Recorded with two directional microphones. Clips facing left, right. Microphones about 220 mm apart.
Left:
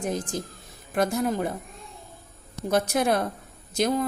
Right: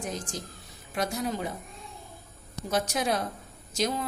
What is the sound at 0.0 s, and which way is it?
A woman's voice, 55° left (ahead or behind).